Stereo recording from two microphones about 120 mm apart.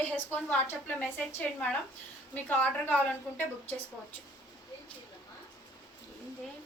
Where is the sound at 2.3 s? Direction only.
15° left (ahead or behind).